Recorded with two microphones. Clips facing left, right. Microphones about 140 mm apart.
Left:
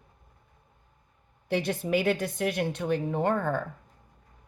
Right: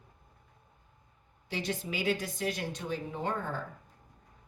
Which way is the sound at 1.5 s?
55° left (ahead or behind).